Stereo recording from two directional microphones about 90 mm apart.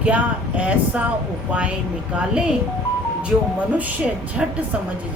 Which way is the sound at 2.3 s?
10° right (ahead or behind).